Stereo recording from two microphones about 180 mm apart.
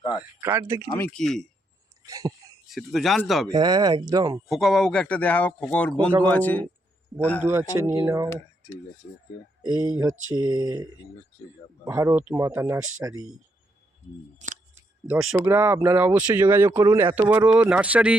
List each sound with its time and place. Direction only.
0.2 s speech: 15° right (ahead or behind)
0.9 s speech: 5° left (ahead or behind)
2.0 s speech: 20° right (ahead or behind)
2.6 s speech: centre (ahead or behind)
3.5 s speech: 20° right (ahead or behind)
4.4 s a man's voice: centre (ahead or behind)
7.4 s speech: 15° right (ahead or behind)
9.7 s speech: 20° right (ahead or behind)
11.9 s speech: 10° right (ahead or behind)
12.8 s speech: 90° right
14.3 s speech: 45° right (ahead or behind)
15.1 s speech: 5° right (ahead or behind)
15.5 s speech: 15° right (ahead or behind)